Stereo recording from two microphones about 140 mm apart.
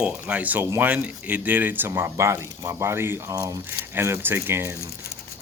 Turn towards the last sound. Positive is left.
turn(degrees=-15)  # may be behind; listen again after turning